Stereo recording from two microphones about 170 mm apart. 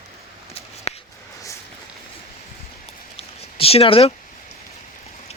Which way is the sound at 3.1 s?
35° left (ahead or behind).